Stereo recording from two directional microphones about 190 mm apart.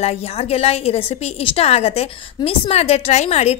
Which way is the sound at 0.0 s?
30° left (ahead or behind).